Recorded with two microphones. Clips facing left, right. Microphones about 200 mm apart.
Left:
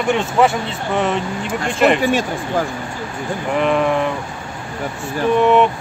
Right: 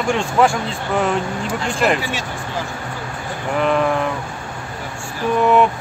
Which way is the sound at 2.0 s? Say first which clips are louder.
Left 8 dB; 50° left (ahead or behind).